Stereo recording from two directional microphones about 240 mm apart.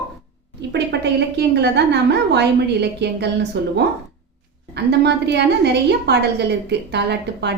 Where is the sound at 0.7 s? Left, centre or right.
Right.